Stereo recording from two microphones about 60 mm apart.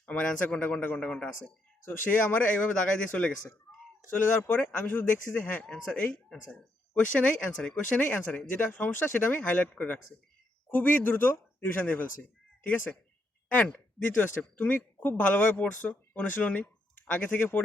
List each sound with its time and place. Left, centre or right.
0.0 s speech: left
1.9 s speech: left; by 3.3 s centre
3.7 s a sound: left
4.1 s speech: left
5.6 s speech: centre
7.9 s speech: left
13.5 s speech: left